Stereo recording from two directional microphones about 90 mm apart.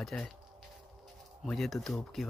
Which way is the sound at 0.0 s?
5° left (ahead or behind).